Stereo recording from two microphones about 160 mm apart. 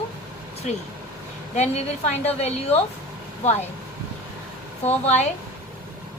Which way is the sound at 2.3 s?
40° left (ahead or behind).